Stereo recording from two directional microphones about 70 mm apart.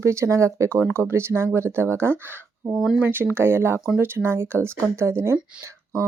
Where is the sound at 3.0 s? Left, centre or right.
Right.